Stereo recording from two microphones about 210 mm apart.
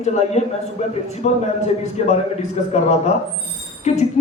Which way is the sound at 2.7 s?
30° left (ahead or behind).